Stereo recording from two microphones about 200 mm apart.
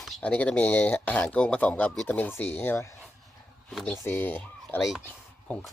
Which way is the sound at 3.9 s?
10° left (ahead or behind).